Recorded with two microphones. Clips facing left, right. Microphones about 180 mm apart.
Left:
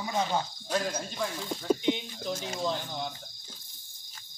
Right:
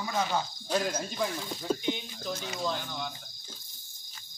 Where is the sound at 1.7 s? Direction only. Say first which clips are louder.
Left 4 dB; 20° left (ahead or behind).